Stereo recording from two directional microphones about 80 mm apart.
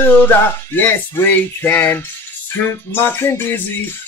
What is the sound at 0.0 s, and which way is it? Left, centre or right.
Music, left.